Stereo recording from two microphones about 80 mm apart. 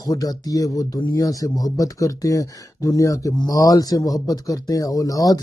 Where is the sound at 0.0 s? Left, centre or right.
Left.